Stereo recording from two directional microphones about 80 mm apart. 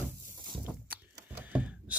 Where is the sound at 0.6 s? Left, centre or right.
Right.